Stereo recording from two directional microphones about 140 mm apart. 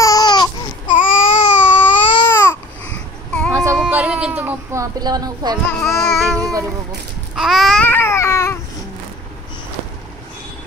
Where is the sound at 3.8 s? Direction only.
10° right (ahead or behind); by 5.6 s 30° right (ahead or behind).